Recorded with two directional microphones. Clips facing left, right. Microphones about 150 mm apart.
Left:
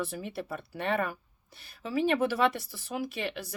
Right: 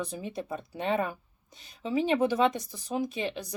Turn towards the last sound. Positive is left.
turn(degrees=-20)  # may be behind; listen again after turning